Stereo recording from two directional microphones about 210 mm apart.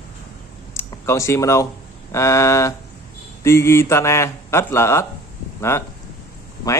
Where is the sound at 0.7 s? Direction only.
15° left (ahead or behind).